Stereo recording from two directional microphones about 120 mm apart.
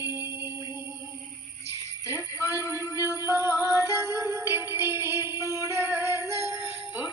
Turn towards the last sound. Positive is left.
turn(degrees=-25)  # may be behind; listen again after turning